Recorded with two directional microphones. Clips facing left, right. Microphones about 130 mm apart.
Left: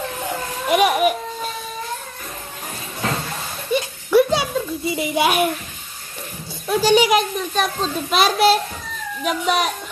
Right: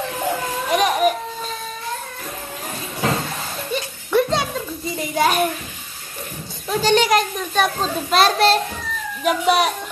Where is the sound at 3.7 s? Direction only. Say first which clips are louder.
Left 4 dB; 5° left (ahead or behind).